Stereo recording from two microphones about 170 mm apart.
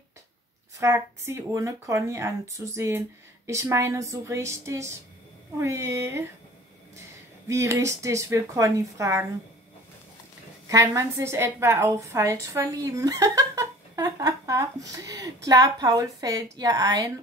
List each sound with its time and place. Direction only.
0.7 s speech: 15° right (ahead or behind)
7.4 s speech: 15° right (ahead or behind)
10.7 s a woman's voice: 20° right (ahead or behind)